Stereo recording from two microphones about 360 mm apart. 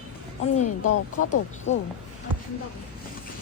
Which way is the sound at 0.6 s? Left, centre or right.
Left.